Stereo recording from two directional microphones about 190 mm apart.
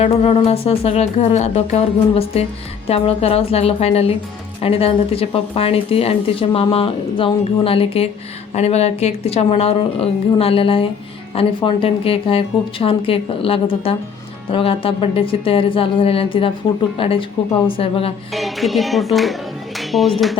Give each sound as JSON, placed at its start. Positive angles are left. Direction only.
{"t": 0.0, "sound": "speech", "side_deg": 35}
{"t": 18.3, "sound": "speech", "side_deg": 0}